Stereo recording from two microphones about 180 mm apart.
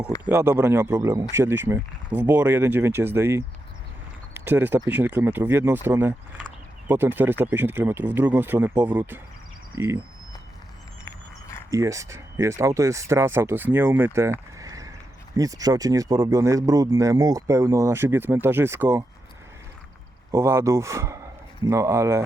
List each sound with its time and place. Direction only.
0.3 s speech: 15° right (ahead or behind)
11.7 s speech: 15° right (ahead or behind)
14.6 s a sound: 20° right (ahead or behind)
15.4 s speech: 20° right (ahead or behind)
20.3 s speech: 15° right (ahead or behind)